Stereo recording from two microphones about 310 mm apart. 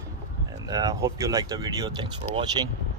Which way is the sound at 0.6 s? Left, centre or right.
Centre.